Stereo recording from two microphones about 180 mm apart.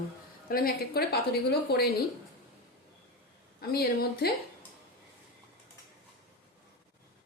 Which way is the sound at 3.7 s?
60° left (ahead or behind).